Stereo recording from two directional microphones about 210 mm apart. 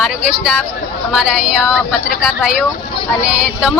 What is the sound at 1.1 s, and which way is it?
Speech, centre (ahead or behind).